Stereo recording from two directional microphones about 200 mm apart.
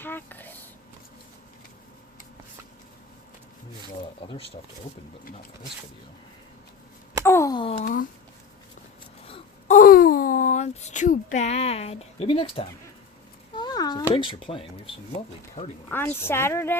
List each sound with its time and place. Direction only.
0.0 s speech: 10° left (ahead or behind)
4.2 s speech: 25° left (ahead or behind)
7.3 s a sound: 15° left (ahead or behind)
7.8 s speech: 45° left (ahead or behind)
9.2 s a sound: 30° left (ahead or behind)
14.1 s speech: 25° left (ahead or behind)
15.9 s a woman's voice: 10° left (ahead or behind)